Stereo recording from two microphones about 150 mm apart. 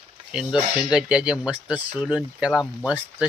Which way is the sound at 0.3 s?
5° right (ahead or behind).